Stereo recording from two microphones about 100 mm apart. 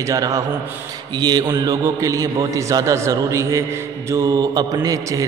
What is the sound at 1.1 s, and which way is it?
A man's voice, 45° right (ahead or behind).